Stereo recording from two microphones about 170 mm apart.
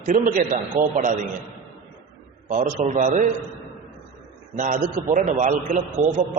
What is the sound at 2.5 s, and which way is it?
Speech, 45° right (ahead or behind).